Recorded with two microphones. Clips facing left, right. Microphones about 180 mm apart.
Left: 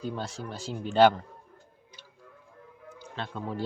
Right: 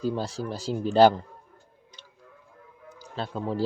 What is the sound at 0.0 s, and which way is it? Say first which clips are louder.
Speech: right 6 dB; 35° right (ahead or behind).